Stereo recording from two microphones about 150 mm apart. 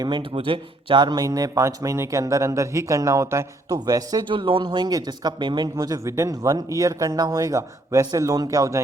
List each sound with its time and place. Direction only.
0.0 s a man's voice: 30° right (ahead or behind)